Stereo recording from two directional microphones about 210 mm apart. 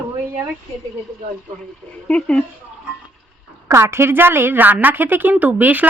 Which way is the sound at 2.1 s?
5° left (ahead or behind).